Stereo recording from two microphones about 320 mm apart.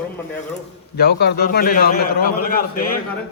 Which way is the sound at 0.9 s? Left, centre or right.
Left.